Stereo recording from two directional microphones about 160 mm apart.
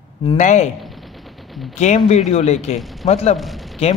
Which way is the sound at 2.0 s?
40° left (ahead or behind).